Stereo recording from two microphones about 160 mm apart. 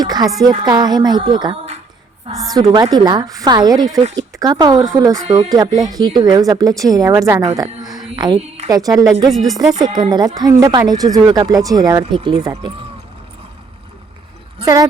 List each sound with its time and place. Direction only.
0.0 s a sound: 25° right (ahead or behind)
0.6 s a woman's voice: 25° right (ahead or behind)
7.5 s a sound: 25° right (ahead or behind)
8.1 s a woman's voice: 25° right (ahead or behind)
8.4 s a woman's voice: 40° right (ahead or behind)
8.7 s a woman's voice: 25° right (ahead or behind)
9.3 s speech: centre (ahead or behind)
9.7 s a woman's voice: 25° right (ahead or behind)
14.6 s speech: 25° right (ahead or behind)